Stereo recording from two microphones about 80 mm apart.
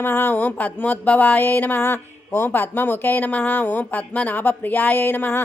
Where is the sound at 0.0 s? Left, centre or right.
Left.